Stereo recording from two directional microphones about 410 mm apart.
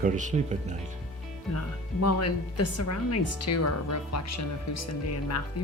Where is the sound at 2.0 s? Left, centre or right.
Left.